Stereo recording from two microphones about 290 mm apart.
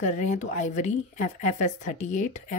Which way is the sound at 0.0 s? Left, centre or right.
Left.